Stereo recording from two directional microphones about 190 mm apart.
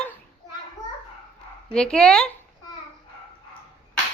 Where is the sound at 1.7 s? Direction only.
5° left (ahead or behind).